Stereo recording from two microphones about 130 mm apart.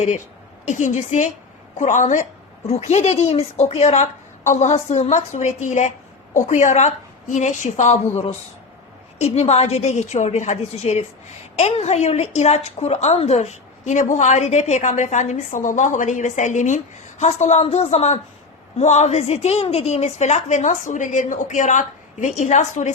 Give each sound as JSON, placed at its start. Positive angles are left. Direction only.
{"t": 0.7, "sound": "a woman's voice", "side_deg": 70}
{"t": 2.6, "sound": "a woman's voice", "side_deg": 55}